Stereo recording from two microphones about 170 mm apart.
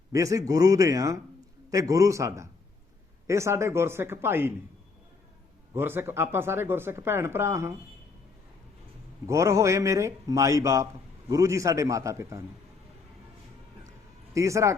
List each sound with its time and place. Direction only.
0.1 s a man's voice: 20° right (ahead or behind)
5.7 s speech: 15° right (ahead or behind)
9.2 s a man's voice: 20° right (ahead or behind)
14.3 s speech: 15° right (ahead or behind)